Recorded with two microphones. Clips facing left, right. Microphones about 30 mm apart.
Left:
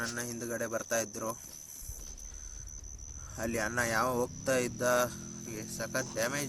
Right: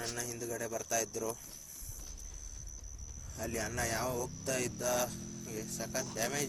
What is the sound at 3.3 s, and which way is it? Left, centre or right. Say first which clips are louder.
Speech: left 5 dB; left.